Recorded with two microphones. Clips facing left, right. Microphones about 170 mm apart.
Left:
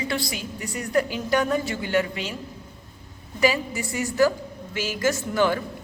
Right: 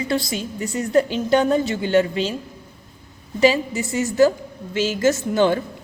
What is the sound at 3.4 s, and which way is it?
A woman's voice, 25° right (ahead or behind).